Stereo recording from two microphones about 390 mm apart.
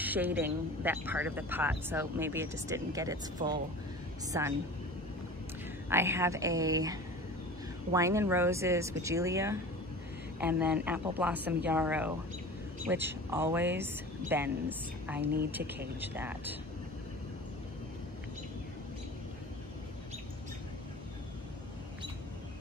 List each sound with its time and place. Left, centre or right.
0.0 s speech: centre
3.4 s speech: centre
4.3 s speech: centre
5.9 s speech: centre